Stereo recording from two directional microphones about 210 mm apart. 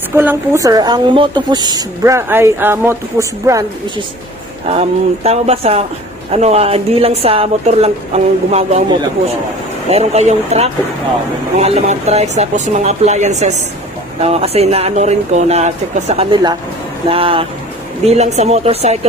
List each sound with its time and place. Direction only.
0.1 s a woman's voice: 10° right (ahead or behind)
4.7 s a woman's voice: 30° right (ahead or behind)
9.8 s a woman's voice: 30° right (ahead or behind)